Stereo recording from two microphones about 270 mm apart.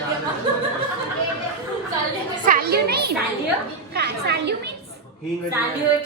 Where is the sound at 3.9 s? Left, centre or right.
Right.